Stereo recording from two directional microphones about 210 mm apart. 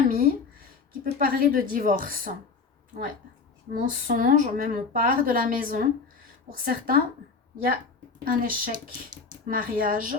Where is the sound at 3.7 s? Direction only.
40° right (ahead or behind).